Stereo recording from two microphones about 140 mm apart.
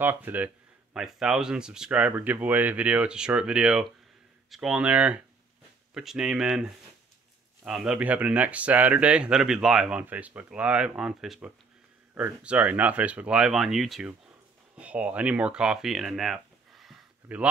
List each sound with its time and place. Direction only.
0.0 s speech: 15° right (ahead or behind)